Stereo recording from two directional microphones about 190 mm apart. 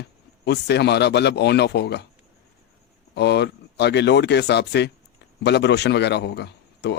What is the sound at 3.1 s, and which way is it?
Speech, 60° left (ahead or behind).